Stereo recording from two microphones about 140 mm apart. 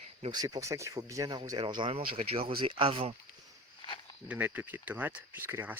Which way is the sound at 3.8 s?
35° left (ahead or behind).